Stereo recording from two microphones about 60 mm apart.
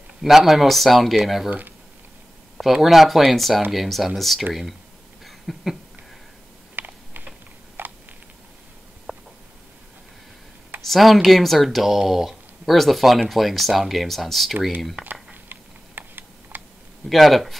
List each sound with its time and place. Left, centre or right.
0.2 s speech: centre
2.5 s speech: centre
5.2 s a sound: centre
6.7 s typing: right
7.8 s a sound: right
9.1 s a sound: centre
10.8 s speech: centre
15.4 s typing: right
17.1 s speech: centre